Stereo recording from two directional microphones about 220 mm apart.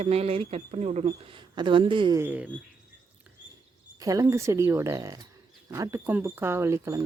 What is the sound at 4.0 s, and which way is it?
Speech, 15° right (ahead or behind).